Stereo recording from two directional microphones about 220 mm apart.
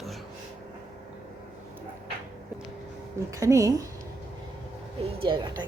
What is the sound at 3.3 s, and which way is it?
Speech, 15° right (ahead or behind).